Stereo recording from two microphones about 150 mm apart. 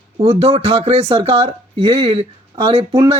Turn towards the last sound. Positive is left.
turn(degrees=-40)  # may be behind; listen again after turning